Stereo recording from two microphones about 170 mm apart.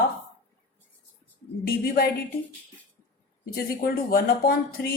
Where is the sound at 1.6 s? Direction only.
60° left (ahead or behind).